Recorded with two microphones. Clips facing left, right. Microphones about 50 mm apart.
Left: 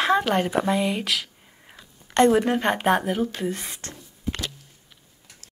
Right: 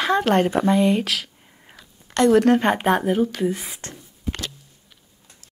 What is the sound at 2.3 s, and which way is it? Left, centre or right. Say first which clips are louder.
Speech: right 5 dB; centre.